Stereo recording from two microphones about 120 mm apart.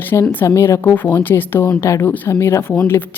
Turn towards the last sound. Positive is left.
turn(degrees=20)  # may be behind; listen again after turning